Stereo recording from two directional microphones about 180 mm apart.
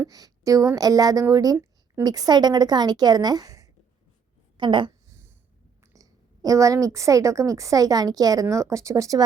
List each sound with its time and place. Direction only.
0.0 s a woman's voice: 20° right (ahead or behind)
4.5 s a sound: 25° right (ahead or behind)
5.8 s a woman's voice: 20° right (ahead or behind)